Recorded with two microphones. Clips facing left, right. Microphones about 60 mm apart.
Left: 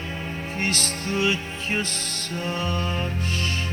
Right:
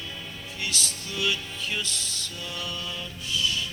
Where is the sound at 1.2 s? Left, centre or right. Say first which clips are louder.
Left 2 dB; left.